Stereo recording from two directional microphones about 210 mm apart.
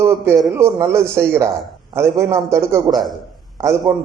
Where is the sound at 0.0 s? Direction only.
15° right (ahead or behind).